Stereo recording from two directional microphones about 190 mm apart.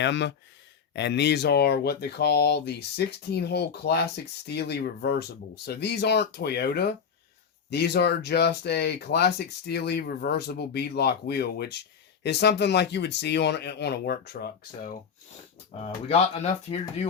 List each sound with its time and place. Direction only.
0.0 s speech: 70° left (ahead or behind)
15.8 s speech: 35° left (ahead or behind)